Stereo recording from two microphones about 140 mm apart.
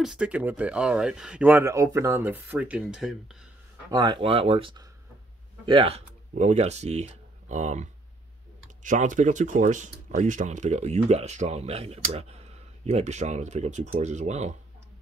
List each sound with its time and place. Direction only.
0.0 s speech: 5° right (ahead or behind)
3.9 s speech: 30° right (ahead or behind); by 14.6 s 55° right (ahead or behind)